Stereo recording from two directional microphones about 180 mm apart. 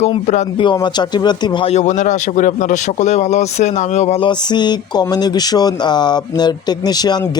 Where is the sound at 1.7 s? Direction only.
40° left (ahead or behind).